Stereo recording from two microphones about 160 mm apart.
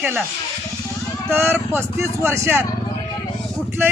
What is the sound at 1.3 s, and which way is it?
A man's voice, 15° right (ahead or behind).